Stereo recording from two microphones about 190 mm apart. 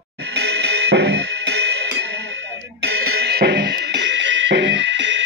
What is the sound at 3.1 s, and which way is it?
Music, 60° right (ahead or behind).